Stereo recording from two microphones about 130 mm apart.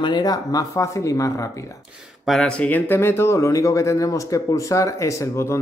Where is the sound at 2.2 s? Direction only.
5° left (ahead or behind).